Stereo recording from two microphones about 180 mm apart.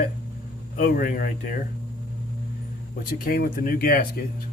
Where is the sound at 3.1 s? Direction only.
55° left (ahead or behind).